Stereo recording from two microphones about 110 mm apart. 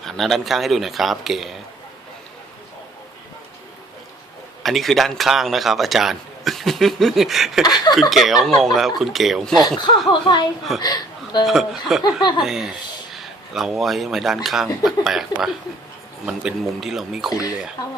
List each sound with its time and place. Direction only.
0.0 s a man's voice: centre (ahead or behind)
4.6 s a man's voice: centre (ahead or behind)
7.6 s speech: 40° left (ahead or behind)
8.1 s a man's voice: centre (ahead or behind)
10.1 s a woman's voice: 40° left (ahead or behind)
11.4 s a man's voice: 5° right (ahead or behind)